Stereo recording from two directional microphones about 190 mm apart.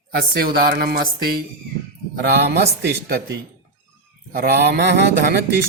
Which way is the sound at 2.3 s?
60° right (ahead or behind).